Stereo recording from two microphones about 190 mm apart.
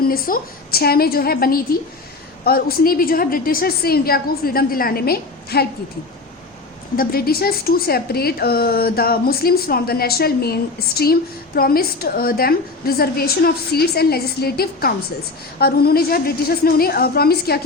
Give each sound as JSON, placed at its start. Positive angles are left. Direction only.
{"t": 0.1, "sound": "a woman's voice", "side_deg": 50}
{"t": 6.9, "sound": "a woman's voice", "side_deg": 50}